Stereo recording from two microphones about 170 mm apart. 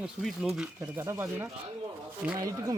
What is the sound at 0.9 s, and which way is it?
Speech, 15° right (ahead or behind).